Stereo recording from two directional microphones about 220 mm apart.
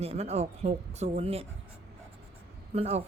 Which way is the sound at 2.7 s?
30° right (ahead or behind).